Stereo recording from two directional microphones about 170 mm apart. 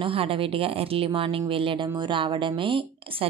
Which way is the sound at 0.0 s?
35° right (ahead or behind).